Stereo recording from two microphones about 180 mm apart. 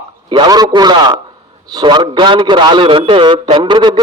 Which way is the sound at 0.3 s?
25° right (ahead or behind).